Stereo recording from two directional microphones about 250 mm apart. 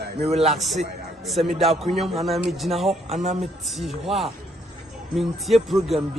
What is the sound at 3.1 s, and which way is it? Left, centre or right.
Speech, right.